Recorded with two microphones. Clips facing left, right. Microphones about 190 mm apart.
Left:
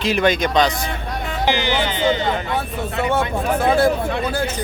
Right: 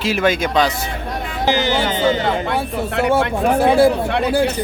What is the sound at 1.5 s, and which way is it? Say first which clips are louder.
Speech: right 3 dB; 45° right (ahead or behind).